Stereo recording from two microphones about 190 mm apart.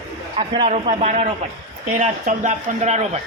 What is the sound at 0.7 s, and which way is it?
Speech, 35° right (ahead or behind).